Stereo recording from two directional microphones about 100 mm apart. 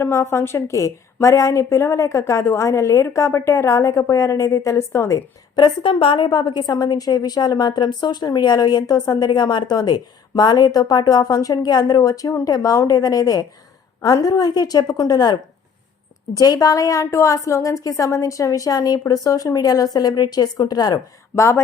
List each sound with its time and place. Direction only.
0.0 s a woman's voice: 25° left (ahead or behind)
5.6 s a woman's voice: 60° left (ahead or behind); by 21.0 s 40° left (ahead or behind)
21.3 s a woman's voice: 25° left (ahead or behind)